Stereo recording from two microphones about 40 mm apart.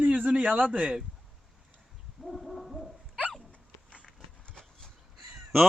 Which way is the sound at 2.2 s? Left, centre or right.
Centre.